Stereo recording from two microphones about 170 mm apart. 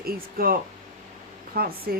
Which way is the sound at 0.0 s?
60° right (ahead or behind).